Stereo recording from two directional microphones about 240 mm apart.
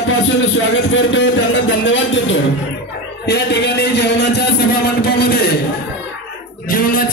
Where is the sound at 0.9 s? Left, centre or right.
Left.